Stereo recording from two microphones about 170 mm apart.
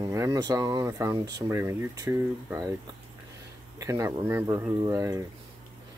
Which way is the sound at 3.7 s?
20° right (ahead or behind).